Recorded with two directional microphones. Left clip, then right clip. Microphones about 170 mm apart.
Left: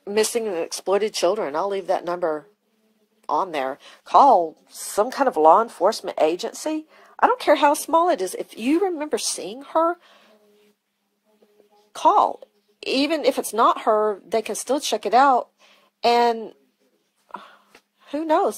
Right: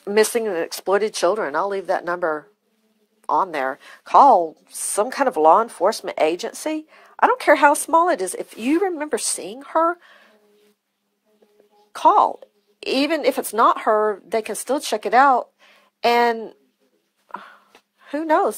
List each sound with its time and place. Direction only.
0.0 s a woman's voice: 5° right (ahead or behind)
11.9 s a woman's voice: 10° right (ahead or behind)
17.3 s a sound: 10° right (ahead or behind)
18.0 s speech: 15° right (ahead or behind)